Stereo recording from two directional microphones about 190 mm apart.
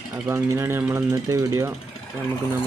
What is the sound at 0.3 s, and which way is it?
Speech, 15° right (ahead or behind).